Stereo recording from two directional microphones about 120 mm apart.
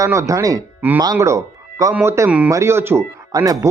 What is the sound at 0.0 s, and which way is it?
Speech, 25° right (ahead or behind).